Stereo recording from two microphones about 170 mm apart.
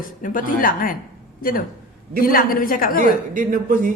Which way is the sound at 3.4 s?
50° right (ahead or behind).